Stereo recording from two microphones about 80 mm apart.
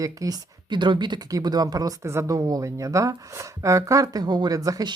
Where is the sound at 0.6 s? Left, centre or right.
Right.